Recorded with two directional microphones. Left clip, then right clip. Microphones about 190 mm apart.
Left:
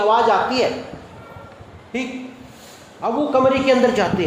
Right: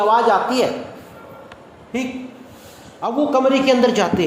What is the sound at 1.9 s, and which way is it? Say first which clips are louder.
A man's voice: right 1 dB; 45° right (ahead or behind).